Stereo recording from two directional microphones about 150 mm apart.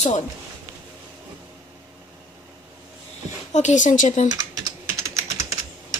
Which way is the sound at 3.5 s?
55° left (ahead or behind).